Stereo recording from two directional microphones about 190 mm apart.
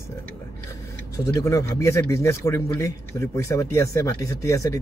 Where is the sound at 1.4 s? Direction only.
15° left (ahead or behind).